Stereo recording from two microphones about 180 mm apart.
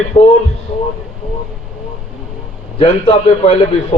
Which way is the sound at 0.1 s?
25° left (ahead or behind).